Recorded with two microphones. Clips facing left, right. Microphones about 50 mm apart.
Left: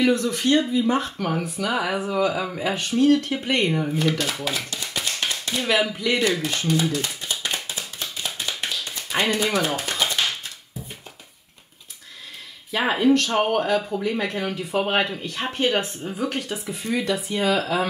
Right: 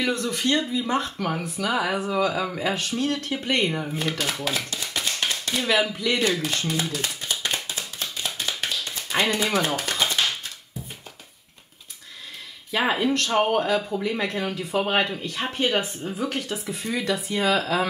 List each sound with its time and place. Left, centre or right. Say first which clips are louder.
0.2 s speech: left 3 dB; centre
1.1 s speech: left 2 dB; centre
4.2 s a sound: even; centre
5.6 s speech: left 1 dB; centre
7.6 s a sound: even; centre
8.5 s tap: even; centre
9.7 s a sound: even; centre
12.7 s speech: left 3 dB; centre
17.5 s speech: even; centre